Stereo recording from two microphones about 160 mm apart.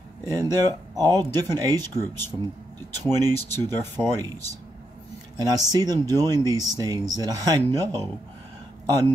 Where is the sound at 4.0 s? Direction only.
15° right (ahead or behind).